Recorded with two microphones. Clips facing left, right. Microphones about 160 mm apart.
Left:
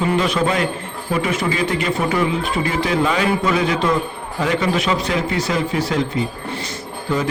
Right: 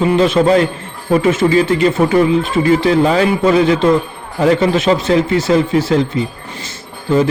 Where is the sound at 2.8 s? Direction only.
35° right (ahead or behind).